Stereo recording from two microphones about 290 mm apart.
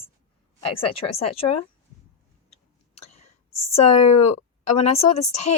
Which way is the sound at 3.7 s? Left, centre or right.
Left.